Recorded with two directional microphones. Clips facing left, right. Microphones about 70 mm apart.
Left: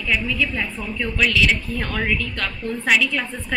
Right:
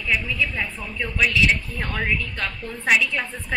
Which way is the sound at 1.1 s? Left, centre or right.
Centre.